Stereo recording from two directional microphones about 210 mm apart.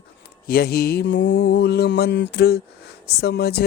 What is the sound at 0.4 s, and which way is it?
Mantra, 45° left (ahead or behind).